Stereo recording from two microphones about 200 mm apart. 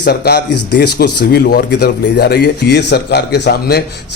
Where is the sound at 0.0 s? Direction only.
55° left (ahead or behind).